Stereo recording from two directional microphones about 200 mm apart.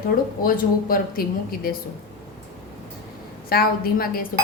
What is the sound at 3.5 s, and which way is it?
Sizzle, 50° left (ahead or behind).